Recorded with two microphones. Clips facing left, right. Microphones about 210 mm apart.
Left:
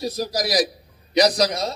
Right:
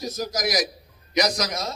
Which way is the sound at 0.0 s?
35° left (ahead or behind).